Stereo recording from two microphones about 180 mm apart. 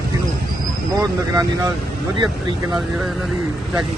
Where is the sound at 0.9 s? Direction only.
20° right (ahead or behind).